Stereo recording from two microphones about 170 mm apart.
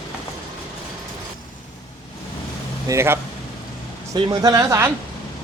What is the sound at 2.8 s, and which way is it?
Speech, 15° right (ahead or behind).